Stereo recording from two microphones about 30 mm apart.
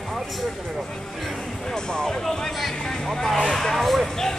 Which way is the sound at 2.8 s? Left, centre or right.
Centre.